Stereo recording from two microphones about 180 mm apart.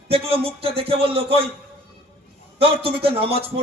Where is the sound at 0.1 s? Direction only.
30° right (ahead or behind).